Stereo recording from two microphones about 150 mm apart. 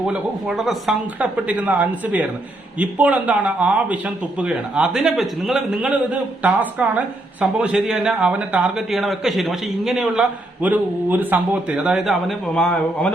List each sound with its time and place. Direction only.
0.1 s a man's voice: 5° right (ahead or behind)